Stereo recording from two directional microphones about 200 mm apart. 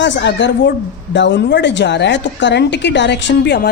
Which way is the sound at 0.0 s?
60° left (ahead or behind).